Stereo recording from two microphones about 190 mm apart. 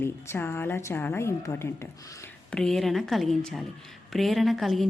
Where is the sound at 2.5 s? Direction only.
5° left (ahead or behind).